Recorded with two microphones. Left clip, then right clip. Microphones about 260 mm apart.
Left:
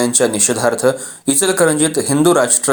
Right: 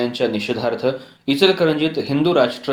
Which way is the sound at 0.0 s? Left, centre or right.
Left.